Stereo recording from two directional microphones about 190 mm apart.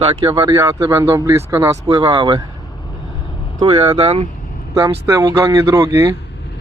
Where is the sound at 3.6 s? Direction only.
30° right (ahead or behind).